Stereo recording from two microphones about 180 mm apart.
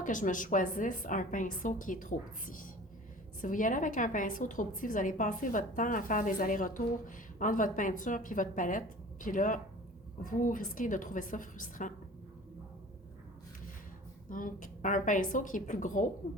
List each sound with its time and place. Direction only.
0.0 s a woman's voice: 45° left (ahead or behind)
14.3 s a woman's voice: 50° left (ahead or behind)